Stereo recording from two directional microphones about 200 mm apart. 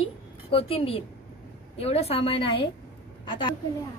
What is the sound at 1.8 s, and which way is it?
Speech, 30° left (ahead or behind).